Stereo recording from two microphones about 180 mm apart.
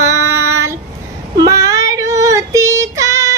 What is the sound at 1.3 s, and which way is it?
Child singing, 15° right (ahead or behind).